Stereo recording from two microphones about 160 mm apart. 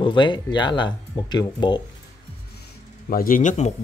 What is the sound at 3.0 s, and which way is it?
Speech, 65° left (ahead or behind).